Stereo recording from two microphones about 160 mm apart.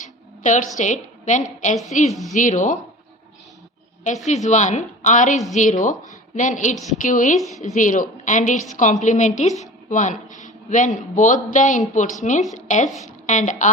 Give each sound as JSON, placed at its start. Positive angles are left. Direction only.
{"t": 0.4, "sound": "speech", "side_deg": 50}
{"t": 4.4, "sound": "a woman's voice", "side_deg": 50}